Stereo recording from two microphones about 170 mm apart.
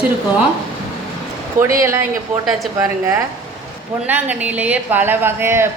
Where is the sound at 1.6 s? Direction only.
50° right (ahead or behind).